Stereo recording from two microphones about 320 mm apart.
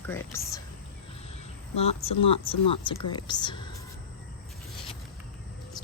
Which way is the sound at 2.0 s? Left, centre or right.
Centre.